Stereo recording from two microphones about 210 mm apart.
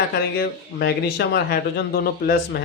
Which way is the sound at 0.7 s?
50° left (ahead or behind).